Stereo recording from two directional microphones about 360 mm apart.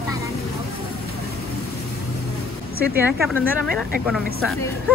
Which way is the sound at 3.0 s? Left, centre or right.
Centre.